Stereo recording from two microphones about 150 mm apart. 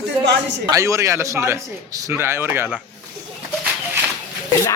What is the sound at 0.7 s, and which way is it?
A man's voice, 20° right (ahead or behind).